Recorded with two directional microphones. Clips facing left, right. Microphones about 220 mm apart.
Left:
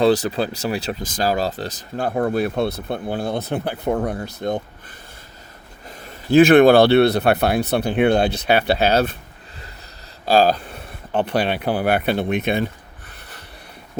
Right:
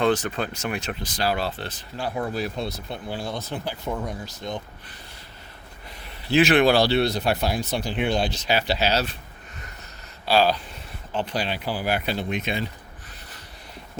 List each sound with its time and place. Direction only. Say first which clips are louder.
0.0 s speech: left 6 dB; 35° left (ahead or behind)
2.0 s speech: left 7 dB; 50° left (ahead or behind)
6.1 s speech: left 7 dB; 50° left (ahead or behind)
10.2 s speech: left 5 dB; 45° left (ahead or behind)